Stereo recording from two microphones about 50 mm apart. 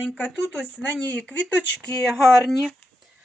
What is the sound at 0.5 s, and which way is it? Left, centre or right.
Speech, left.